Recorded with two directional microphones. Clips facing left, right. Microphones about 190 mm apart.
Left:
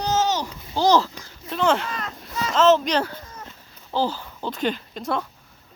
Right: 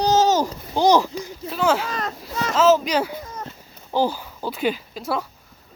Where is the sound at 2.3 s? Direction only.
55° right (ahead or behind).